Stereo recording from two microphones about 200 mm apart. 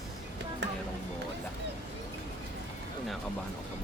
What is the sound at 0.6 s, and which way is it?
Music, 60° right (ahead or behind).